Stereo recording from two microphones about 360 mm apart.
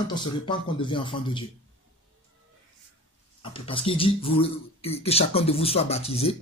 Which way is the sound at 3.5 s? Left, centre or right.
Centre.